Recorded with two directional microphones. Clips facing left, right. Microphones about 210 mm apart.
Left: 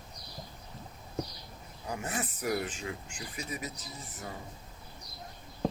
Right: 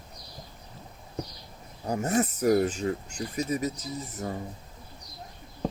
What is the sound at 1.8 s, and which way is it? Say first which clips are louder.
Speech: right 10 dB; 40° right (ahead or behind).